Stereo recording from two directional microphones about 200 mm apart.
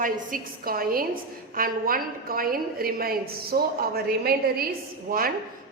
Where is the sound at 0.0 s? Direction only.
45° right (ahead or behind).